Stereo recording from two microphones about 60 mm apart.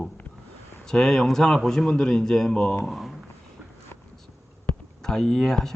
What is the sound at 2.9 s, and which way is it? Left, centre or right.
Speech, centre.